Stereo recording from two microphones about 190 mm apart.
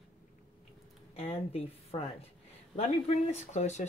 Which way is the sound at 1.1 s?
30° left (ahead or behind).